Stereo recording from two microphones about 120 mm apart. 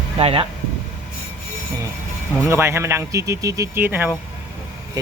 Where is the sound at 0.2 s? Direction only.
55° right (ahead or behind).